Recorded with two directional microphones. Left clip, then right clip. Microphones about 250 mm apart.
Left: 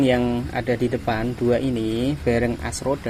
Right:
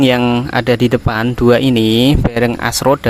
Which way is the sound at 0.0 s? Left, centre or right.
Right.